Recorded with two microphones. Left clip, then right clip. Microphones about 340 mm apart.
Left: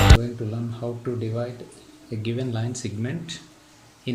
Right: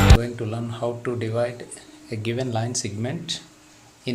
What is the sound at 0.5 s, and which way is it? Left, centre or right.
Speech, right.